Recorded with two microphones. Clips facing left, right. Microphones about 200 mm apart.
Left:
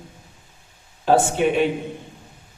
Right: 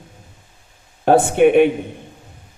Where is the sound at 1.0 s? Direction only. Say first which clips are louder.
Right 5 dB; 60° right (ahead or behind).